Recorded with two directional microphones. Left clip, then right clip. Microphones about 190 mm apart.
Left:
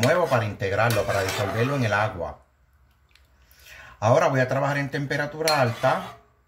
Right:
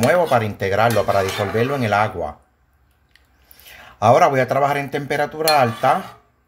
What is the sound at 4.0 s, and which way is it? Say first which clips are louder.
Speech: right 7 dB; 40° right (ahead or behind).